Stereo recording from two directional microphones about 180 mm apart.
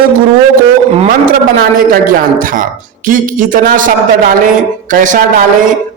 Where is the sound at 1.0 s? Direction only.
50° right (ahead or behind).